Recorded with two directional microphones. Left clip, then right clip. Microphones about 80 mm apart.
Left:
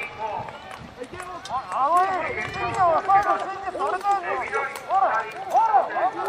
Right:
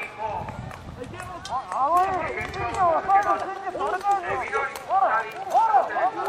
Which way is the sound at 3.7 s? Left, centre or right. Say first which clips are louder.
Left 1 dB; left.